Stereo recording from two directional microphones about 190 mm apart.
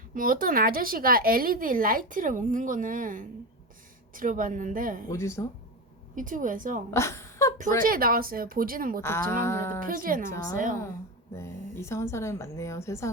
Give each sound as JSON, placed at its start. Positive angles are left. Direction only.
{"t": 0.1, "sound": "speech", "side_deg": -50}
{"t": 5.0, "sound": "a woman's voice", "side_deg": 15}
{"t": 6.1, "sound": "speech", "side_deg": -45}
{"t": 6.9, "sound": "a sound", "side_deg": 15}
{"t": 7.8, "sound": "speech", "side_deg": -50}
{"t": 9.0, "sound": "a woman's voice", "side_deg": 15}
{"t": 9.8, "sound": "speech", "side_deg": -45}
{"t": 11.3, "sound": "a woman's voice", "side_deg": 15}